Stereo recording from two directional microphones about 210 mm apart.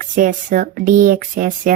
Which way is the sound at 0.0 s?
40° right (ahead or behind).